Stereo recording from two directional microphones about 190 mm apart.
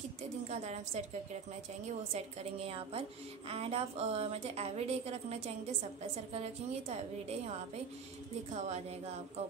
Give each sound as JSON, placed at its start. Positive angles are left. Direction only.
{"t": 0.5, "sound": "a woman's voice", "side_deg": -35}